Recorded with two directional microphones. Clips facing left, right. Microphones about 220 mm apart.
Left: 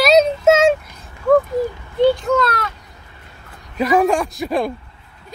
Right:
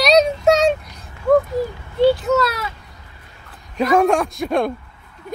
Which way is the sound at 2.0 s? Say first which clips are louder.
Even; 5° right (ahead or behind).